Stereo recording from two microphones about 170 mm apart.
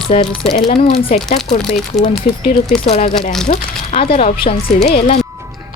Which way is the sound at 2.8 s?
35° left (ahead or behind).